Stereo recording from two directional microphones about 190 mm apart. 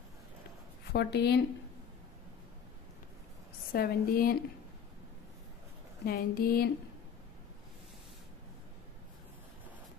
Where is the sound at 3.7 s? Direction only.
55° left (ahead or behind).